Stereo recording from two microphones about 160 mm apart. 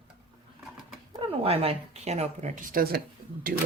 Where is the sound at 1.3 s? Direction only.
40° right (ahead or behind); by 3.0 s 65° right (ahead or behind).